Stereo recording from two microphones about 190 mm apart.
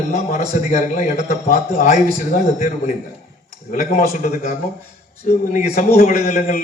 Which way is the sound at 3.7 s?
45° left (ahead or behind).